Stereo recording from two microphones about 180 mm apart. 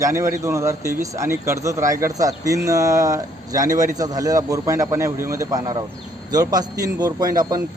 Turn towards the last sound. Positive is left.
turn(degrees=-20)  # may be behind; listen again after turning